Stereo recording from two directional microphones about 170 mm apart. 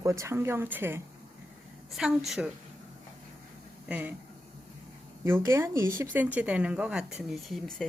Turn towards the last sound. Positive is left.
turn(degrees=0)  # may be behind; listen again after turning